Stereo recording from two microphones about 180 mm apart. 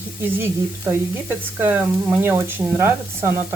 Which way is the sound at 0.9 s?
15° right (ahead or behind).